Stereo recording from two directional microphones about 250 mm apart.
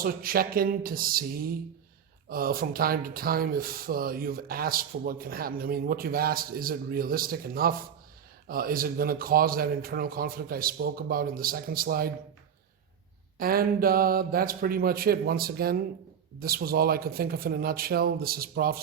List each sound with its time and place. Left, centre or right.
0.0 s speech: right
13.4 s speech: right